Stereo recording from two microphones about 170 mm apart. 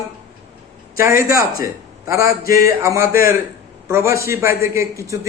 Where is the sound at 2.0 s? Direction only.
15° right (ahead or behind).